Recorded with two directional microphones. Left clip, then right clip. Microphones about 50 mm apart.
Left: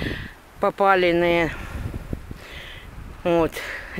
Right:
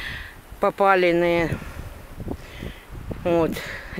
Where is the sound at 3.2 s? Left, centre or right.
Left.